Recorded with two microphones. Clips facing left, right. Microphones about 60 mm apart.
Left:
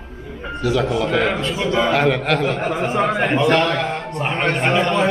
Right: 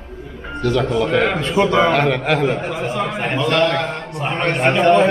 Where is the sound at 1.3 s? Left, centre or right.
Right.